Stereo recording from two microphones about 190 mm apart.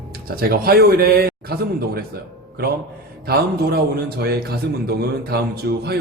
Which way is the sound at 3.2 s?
55° right (ahead or behind).